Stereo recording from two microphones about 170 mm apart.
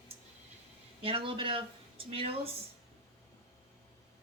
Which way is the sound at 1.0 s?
30° right (ahead or behind).